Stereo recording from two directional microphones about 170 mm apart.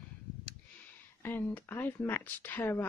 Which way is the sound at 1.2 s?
10° left (ahead or behind).